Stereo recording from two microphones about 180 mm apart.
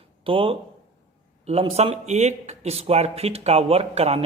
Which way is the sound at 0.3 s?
30° right (ahead or behind).